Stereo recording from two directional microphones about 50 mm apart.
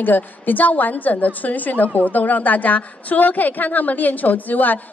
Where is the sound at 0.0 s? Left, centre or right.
Left.